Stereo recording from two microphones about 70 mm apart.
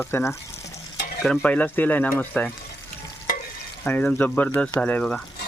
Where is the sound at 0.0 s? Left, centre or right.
Left.